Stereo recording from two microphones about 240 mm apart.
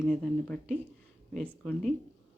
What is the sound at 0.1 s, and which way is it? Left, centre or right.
Speech, centre.